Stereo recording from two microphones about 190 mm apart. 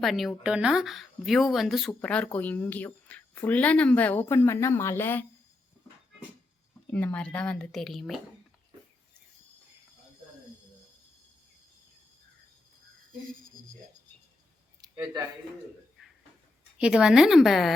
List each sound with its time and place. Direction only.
0.0 s speech: centre (ahead or behind)
6.9 s speech: 5° left (ahead or behind)
14.8 s a sound: 15° right (ahead or behind)
16.7 s speech: 5° right (ahead or behind)